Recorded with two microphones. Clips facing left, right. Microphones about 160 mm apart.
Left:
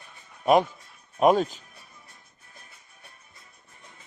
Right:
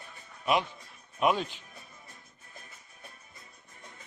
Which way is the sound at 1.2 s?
45° left (ahead or behind).